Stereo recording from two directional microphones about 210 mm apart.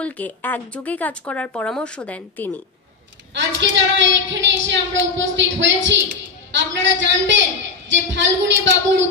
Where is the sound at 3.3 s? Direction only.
60° right (ahead or behind).